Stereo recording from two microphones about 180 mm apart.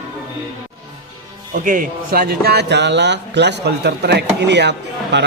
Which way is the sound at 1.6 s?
50° right (ahead or behind).